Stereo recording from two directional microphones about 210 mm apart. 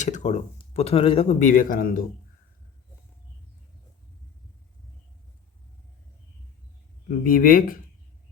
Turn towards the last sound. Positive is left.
turn(degrees=40)  # may be behind; listen again after turning